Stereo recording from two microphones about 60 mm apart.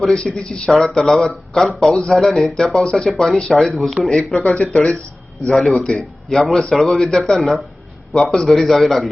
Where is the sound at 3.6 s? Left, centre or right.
Centre.